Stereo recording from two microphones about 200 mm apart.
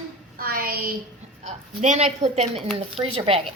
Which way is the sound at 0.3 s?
45° right (ahead or behind).